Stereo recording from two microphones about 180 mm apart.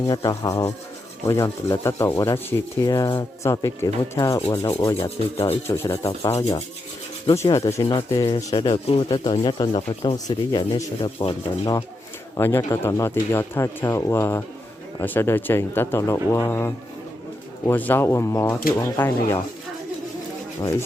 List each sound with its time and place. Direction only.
0.1 s speech: 20° left (ahead or behind)
4.9 s speech: 35° left (ahead or behind)
5.6 s speech: 15° left (ahead or behind)
7.3 s speech: 20° left (ahead or behind)
12.4 s speech: 15° left (ahead or behind)
20.6 s speech: 15° left (ahead or behind)